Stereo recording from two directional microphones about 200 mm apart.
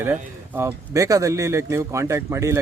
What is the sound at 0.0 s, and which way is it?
A man's voice, 10° right (ahead or behind).